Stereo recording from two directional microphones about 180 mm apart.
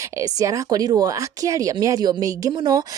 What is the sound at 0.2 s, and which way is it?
Speech, 20° right (ahead or behind).